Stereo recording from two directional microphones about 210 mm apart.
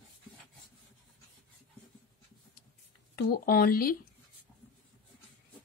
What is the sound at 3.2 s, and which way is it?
Speech, 45° left (ahead or behind).